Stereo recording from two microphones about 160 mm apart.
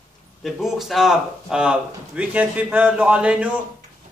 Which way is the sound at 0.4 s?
Centre (ahead or behind).